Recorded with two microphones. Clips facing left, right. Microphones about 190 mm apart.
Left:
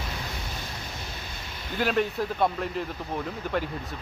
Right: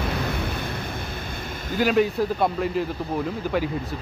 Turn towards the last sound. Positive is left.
turn(degrees=-5)  # may be behind; listen again after turning